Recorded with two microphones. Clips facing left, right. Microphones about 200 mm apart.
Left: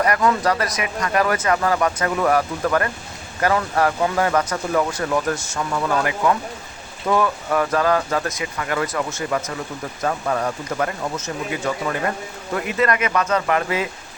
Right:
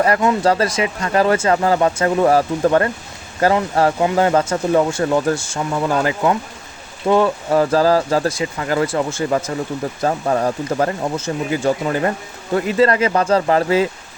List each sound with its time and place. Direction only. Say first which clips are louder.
0.0 s speech: right 3 dB; 25° right (ahead or behind)